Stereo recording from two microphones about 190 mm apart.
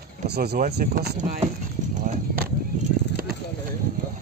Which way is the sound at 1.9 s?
45° right (ahead or behind).